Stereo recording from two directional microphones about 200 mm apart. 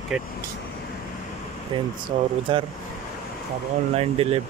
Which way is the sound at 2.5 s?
25° right (ahead or behind).